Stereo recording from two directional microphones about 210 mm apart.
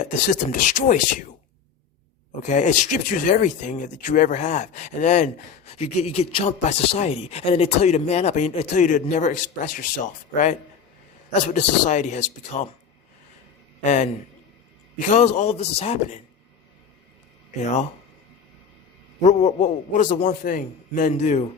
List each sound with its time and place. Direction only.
0.0 s speech: 35° left (ahead or behind)
2.5 s speech: 35° left (ahead or behind)
13.8 s speech: 35° left (ahead or behind)
17.6 s speech: 35° left (ahead or behind)
19.2 s speech: 30° left (ahead or behind)